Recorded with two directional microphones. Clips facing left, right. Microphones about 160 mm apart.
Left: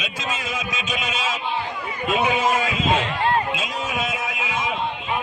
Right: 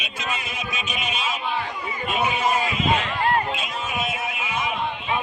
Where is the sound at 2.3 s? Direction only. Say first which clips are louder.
Left 2 dB; 90° left.